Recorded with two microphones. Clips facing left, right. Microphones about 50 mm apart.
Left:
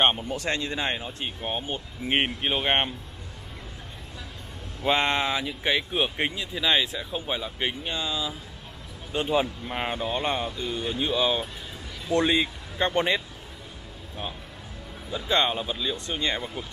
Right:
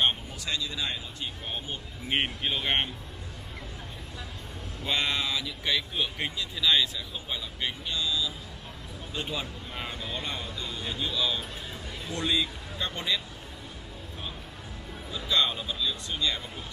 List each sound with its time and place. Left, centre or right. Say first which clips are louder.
0.3 s speech: left 6 dB; left
5.0 s speech: left 5 dB; left
15.0 s speech: left 3 dB; left